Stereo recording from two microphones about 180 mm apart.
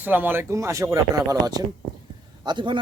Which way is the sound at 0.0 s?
10° right (ahead or behind).